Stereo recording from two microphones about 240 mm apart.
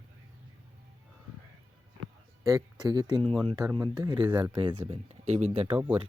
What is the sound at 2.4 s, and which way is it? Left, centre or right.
Speech, centre.